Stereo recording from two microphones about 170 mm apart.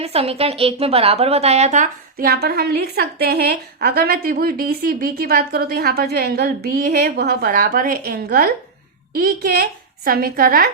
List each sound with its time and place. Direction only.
0.0 s a woman's voice: 35° right (ahead or behind); by 10.7 s 60° right (ahead or behind)